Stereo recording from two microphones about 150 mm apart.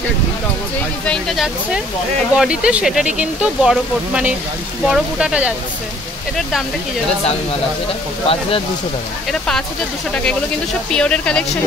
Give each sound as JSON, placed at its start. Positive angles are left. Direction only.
{"t": 1.0, "sound": "speech", "side_deg": 5}
{"t": 8.3, "sound": "speech", "side_deg": 40}
{"t": 10.9, "sound": "speech", "side_deg": 5}